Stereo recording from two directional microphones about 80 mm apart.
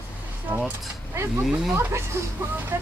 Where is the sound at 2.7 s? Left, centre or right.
Right.